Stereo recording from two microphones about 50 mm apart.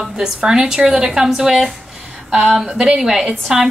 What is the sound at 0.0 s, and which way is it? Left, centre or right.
A woman's voice, centre.